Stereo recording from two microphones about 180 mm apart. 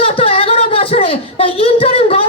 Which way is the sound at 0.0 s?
30° left (ahead or behind).